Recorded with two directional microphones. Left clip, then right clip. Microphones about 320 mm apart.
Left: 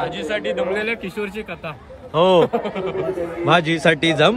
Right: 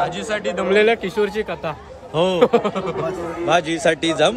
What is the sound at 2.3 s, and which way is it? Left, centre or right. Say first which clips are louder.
Speech: right 1 dB; right.